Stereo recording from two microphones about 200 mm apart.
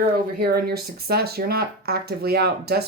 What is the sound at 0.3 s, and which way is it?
Speech, 50° right (ahead or behind).